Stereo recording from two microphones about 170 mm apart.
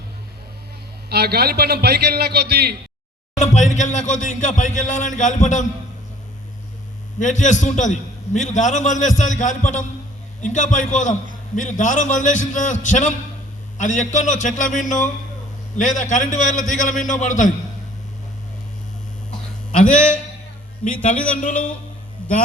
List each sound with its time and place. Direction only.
1.1 s a man's voice: 70° right (ahead or behind)
3.3 s a man's voice: 45° left (ahead or behind)
7.2 s a man's voice: 45° left (ahead or behind)
20.8 s a man's voice: 50° left (ahead or behind)